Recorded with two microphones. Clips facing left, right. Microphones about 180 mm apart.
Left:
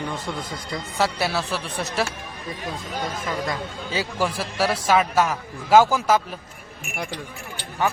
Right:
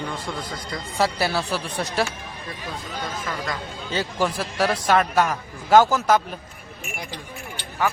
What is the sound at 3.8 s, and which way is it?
A man's voice, 5° left (ahead or behind).